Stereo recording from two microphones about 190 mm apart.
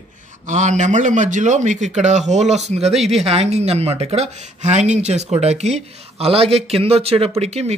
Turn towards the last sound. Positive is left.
turn(degrees=-35)  # may be behind; listen again after turning